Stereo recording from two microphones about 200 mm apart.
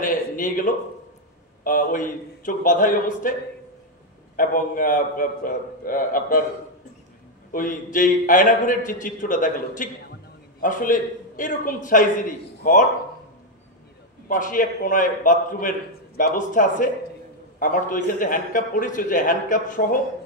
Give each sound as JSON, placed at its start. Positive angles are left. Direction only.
{"t": 0.0, "sound": "a sound", "side_deg": 40}
{"t": 1.6, "sound": "a man's voice", "side_deg": 40}
{"t": 4.4, "sound": "a man's voice", "side_deg": 45}
{"t": 7.5, "sound": "a man's voice", "side_deg": 40}
{"t": 14.3, "sound": "a man's voice", "side_deg": 40}